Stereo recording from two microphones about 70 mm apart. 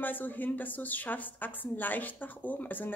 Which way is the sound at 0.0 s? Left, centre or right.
Left.